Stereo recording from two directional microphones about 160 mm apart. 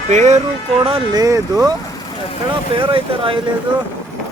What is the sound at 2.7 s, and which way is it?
Speech, 35° right (ahead or behind).